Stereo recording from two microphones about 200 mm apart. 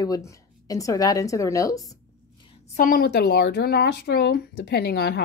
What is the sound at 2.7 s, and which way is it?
A woman's voice, 45° left (ahead or behind).